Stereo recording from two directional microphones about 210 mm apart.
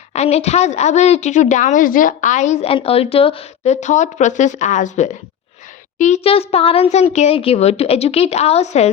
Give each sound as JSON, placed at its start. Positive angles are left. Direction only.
{"t": 0.1, "sound": "a woman's voice", "side_deg": 30}